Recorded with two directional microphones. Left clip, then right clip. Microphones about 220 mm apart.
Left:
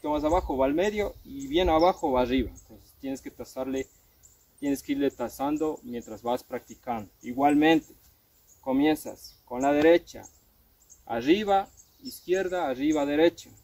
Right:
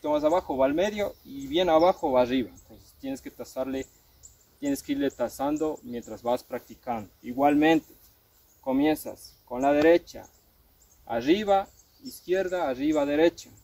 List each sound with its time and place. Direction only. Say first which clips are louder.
0.0 s speech: right 2 dB; 15° right (ahead or behind)